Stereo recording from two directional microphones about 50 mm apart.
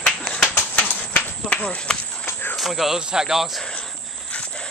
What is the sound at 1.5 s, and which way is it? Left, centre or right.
Speech, left.